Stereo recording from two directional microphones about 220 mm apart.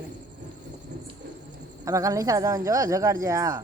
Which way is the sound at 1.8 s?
15° right (ahead or behind).